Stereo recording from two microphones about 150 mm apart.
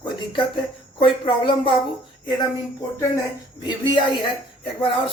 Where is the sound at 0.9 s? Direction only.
35° left (ahead or behind).